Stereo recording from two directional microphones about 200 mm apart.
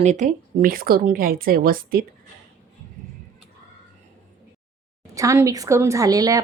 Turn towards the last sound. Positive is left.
turn(degrees=-20)  # may be behind; listen again after turning